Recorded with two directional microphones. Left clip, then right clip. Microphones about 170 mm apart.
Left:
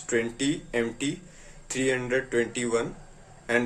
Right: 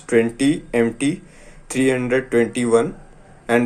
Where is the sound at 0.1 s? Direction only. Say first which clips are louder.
Right 10 dB; 25° right (ahead or behind).